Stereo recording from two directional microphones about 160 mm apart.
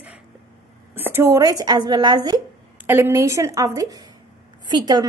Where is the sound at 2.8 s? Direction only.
15° right (ahead or behind).